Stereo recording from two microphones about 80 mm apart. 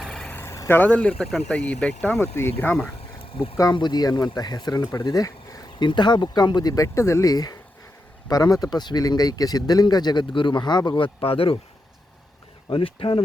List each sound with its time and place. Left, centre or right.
0.0 s vehicle: centre
0.4 s vehicle: left
0.8 s speech: centre
2.1 s speech: left
3.8 s speech: left
5.8 s speech: left
12.6 s speech: left